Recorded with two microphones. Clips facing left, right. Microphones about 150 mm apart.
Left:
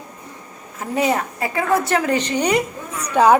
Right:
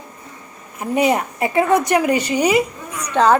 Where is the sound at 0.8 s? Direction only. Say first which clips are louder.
Right 3 dB; 15° right (ahead or behind).